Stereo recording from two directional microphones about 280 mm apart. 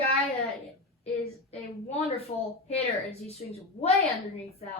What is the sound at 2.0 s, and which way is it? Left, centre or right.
Speech, left.